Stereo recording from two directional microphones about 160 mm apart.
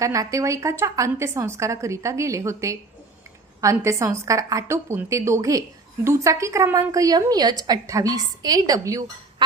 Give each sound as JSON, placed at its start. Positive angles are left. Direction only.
{"t": 0.0, "sound": "a woman's voice", "side_deg": -20}